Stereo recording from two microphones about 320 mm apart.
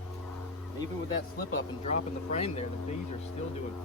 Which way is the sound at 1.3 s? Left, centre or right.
Left.